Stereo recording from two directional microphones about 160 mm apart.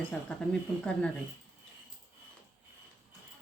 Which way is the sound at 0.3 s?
10° left (ahead or behind).